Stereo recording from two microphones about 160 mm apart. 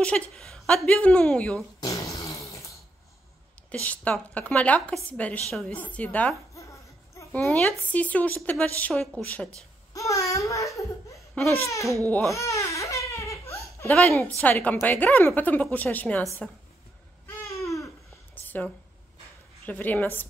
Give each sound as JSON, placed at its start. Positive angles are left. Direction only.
{"t": 0.0, "sound": "a woman's voice", "side_deg": 5}
{"t": 1.8, "sound": "a sound", "side_deg": 20}
{"t": 3.7, "sound": "a woman's voice", "side_deg": 10}
{"t": 9.9, "sound": "a woman's voice", "side_deg": 20}
{"t": 12.1, "sound": "speech", "side_deg": 5}
{"t": 12.4, "sound": "crying", "side_deg": 20}
{"t": 14.4, "sound": "a woman's voice", "side_deg": 10}
{"t": 17.5, "sound": "babbling", "side_deg": 20}
{"t": 18.3, "sound": "a sound", "side_deg": 10}
{"t": 19.6, "sound": "a woman's voice", "side_deg": 10}